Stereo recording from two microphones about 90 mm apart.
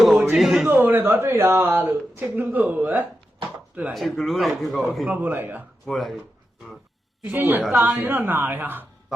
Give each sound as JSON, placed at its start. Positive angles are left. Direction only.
{"t": 0.0, "sound": "a sound", "side_deg": 0}
{"t": 0.3, "sound": "a man's voice", "side_deg": 0}
{"t": 0.7, "sound": "speech", "side_deg": -20}
{"t": 3.9, "sound": "speech", "side_deg": 0}
{"t": 5.0, "sound": "speech", "side_deg": -20}
{"t": 5.8, "sound": "speech", "side_deg": 0}
{"t": 7.3, "sound": "speech", "side_deg": -25}